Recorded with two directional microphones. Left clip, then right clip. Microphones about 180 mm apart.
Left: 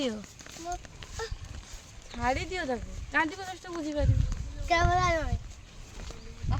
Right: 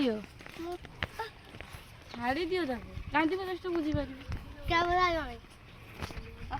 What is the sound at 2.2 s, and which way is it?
Speech, 60° left (ahead or behind).